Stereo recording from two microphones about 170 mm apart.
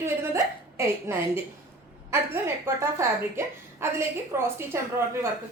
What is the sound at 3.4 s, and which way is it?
Speech, 15° right (ahead or behind).